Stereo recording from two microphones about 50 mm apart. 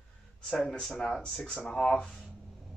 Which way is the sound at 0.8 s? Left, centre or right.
Centre.